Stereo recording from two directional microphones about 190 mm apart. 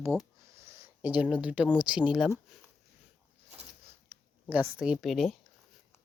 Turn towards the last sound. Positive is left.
turn(degrees=0)  # may be behind; listen again after turning